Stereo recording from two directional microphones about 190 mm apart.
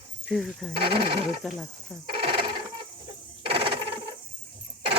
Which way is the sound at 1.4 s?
Centre (ahead or behind).